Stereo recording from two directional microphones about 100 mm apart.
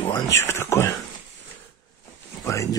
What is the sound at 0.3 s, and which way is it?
Speech, 30° left (ahead or behind).